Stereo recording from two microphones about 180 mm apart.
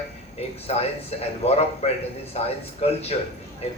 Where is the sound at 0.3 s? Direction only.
35° left (ahead or behind).